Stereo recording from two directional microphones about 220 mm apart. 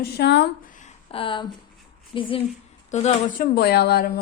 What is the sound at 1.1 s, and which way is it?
A woman's voice, 25° left (ahead or behind).